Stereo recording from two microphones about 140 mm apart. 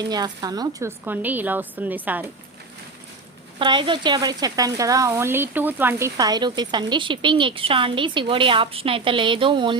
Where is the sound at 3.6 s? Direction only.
35° right (ahead or behind).